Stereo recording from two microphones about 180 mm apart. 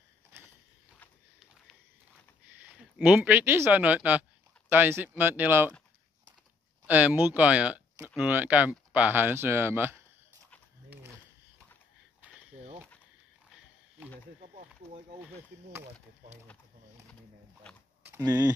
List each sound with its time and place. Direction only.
2.6 s speech: 5° right (ahead or behind)
6.9 s speech: 10° right (ahead or behind)
12.2 s a sound: 10° right (ahead or behind)
17.6 s speech: 5° left (ahead or behind)
18.0 s speech: 20° right (ahead or behind)